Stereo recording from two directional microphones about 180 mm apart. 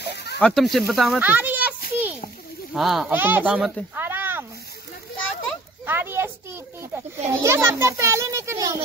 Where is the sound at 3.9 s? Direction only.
10° right (ahead or behind).